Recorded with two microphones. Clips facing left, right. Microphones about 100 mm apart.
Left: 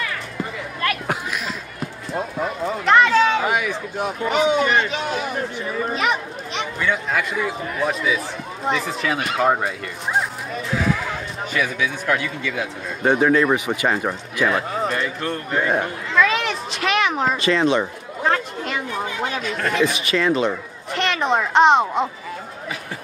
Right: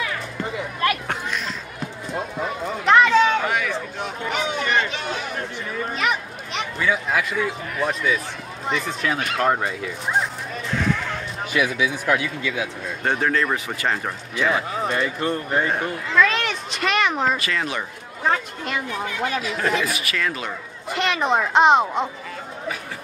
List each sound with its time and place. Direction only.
1.0 s run: 5° left (ahead or behind)
3.4 s a sound: 10° left (ahead or behind)
4.3 s speech: 5° left (ahead or behind)
13.0 s speech: 10° left (ahead or behind); by 15.6 s 5° right (ahead or behind)
16.1 s a sound: 5° left (ahead or behind)
17.4 s speech: 25° left (ahead or behind)
18.2 s speech: centre (ahead or behind)
19.8 s speech: 25° left (ahead or behind)
20.9 s speech: centre (ahead or behind)